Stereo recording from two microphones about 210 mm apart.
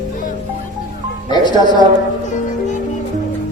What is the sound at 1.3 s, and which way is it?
Speech, 20° left (ahead or behind).